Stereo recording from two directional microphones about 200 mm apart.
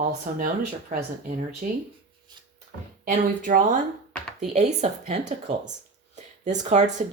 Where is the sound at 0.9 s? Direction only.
45° right (ahead or behind).